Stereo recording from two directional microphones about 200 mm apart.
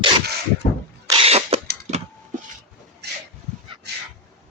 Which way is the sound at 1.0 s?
30° right (ahead or behind).